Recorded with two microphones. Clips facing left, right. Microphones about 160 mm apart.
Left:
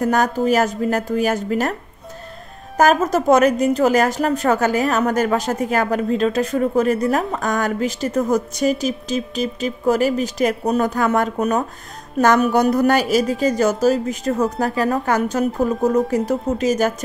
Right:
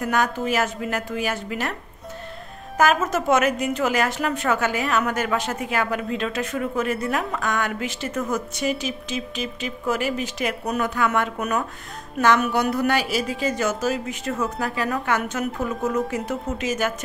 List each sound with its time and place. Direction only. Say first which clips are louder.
0.0 s a woman's voice: left 5 dB; 40° left (ahead or behind)
2.8 s a woman's voice: left 5 dB; 40° left (ahead or behind)